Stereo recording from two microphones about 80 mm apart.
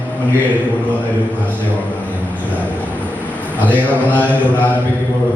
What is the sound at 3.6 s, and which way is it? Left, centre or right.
Mantra, centre.